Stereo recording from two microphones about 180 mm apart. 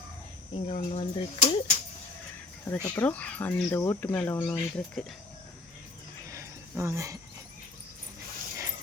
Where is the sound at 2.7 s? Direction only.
10° left (ahead or behind).